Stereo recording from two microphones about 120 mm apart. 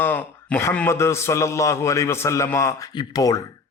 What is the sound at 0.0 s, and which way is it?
A man's voice, 15° left (ahead or behind).